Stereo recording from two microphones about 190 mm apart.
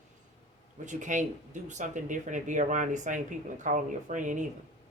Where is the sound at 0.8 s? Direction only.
40° right (ahead or behind).